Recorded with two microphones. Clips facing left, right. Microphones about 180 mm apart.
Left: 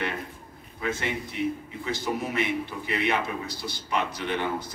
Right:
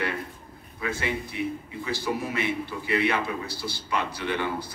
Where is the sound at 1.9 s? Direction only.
20° left (ahead or behind).